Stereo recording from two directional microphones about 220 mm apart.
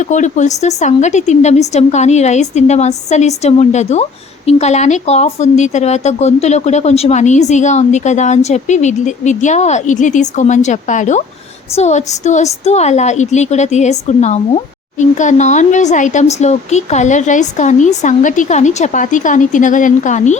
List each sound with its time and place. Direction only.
0.0 s speech: 35° left (ahead or behind)